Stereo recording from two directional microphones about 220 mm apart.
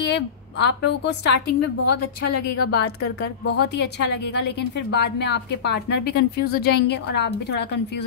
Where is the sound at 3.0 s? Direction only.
45° left (ahead or behind).